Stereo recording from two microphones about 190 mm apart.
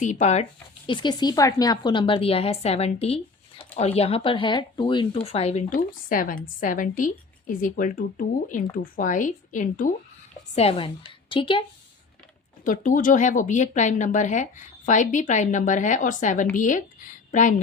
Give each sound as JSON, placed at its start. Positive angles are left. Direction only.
{"t": 0.0, "sound": "speech", "side_deg": 40}
{"t": 0.9, "sound": "a woman's voice", "side_deg": 25}
{"t": 10.5, "sound": "a woman's voice", "side_deg": 30}
{"t": 12.6, "sound": "speech", "side_deg": 45}